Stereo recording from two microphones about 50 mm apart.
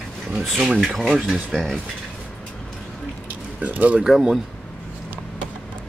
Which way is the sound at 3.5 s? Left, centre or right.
Right.